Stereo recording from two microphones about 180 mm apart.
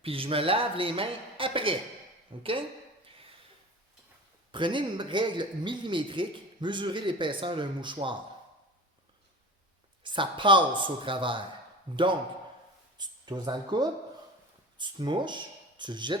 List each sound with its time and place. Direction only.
0.0 s a man's voice: 30° right (ahead or behind)
4.5 s a man's voice: 25° right (ahead or behind)
10.0 s a man's voice: 25° right (ahead or behind)
13.0 s speech: 25° right (ahead or behind)